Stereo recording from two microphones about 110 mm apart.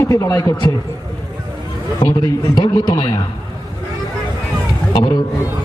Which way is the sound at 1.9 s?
35° left (ahead or behind).